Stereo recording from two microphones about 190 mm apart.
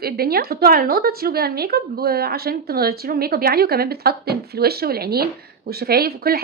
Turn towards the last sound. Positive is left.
turn(degrees=-55)  # may be behind; listen again after turning